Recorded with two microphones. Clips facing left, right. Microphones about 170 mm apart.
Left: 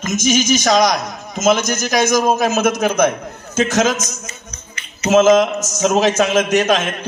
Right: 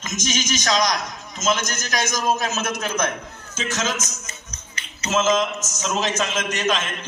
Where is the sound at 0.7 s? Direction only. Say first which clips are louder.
Left 4 dB; 60° left (ahead or behind).